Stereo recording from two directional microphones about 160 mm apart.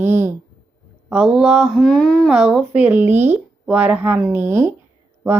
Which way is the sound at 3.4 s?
5° right (ahead or behind).